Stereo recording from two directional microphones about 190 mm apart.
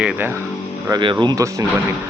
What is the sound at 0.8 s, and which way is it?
Speech, 20° right (ahead or behind).